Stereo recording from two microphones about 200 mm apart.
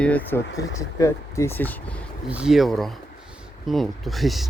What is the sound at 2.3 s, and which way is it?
Speech, 5° right (ahead or behind).